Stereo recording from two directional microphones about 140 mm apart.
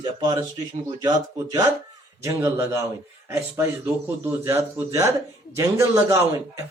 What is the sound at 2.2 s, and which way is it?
A man's voice, 20° right (ahead or behind).